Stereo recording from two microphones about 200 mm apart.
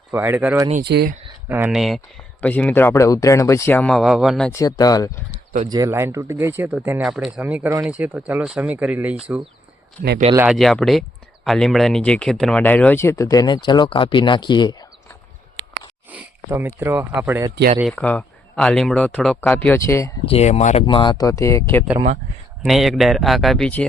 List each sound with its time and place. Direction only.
0.1 s speech: 10° right (ahead or behind)
0.9 s speech: 55° right (ahead or behind)
1.5 s speech: 10° right (ahead or behind)
1.8 s speech: centre (ahead or behind)
4.5 s speech: 20° left (ahead or behind)
5.6 s speech: 20° right (ahead or behind)
10.3 s speech: 5° right (ahead or behind); by 14.8 s 20° left (ahead or behind)
16.0 s speech: 10° right (ahead or behind)
17.9 s speech: 5° left (ahead or behind)
20.2 s speech: 30° left (ahead or behind); by 21.8 s 15° left (ahead or behind)
22.6 s speech: centre (ahead or behind)